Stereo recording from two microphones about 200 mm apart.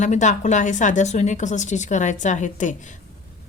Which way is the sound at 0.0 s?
35° left (ahead or behind).